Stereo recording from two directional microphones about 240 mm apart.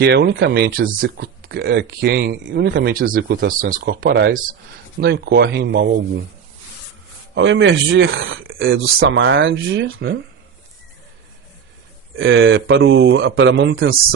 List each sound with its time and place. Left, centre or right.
0.0 s speech: right
7.3 s speech: right
12.1 s speech: right